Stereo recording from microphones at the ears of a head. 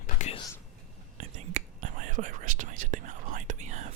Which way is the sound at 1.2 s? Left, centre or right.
Right.